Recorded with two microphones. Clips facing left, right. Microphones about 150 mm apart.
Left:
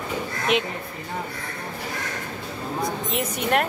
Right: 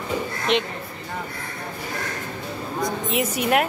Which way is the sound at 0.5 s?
5° left (ahead or behind).